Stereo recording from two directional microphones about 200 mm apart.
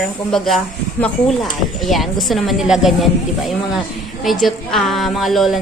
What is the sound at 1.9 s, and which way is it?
A woman's voice, centre (ahead or behind).